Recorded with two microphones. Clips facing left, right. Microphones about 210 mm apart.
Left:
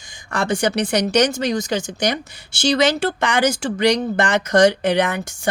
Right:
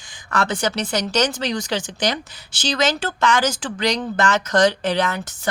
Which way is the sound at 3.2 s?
15° left (ahead or behind).